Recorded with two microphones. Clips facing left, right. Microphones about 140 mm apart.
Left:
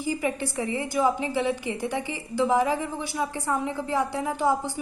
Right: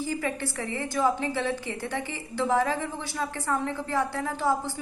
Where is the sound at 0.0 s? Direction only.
15° left (ahead or behind).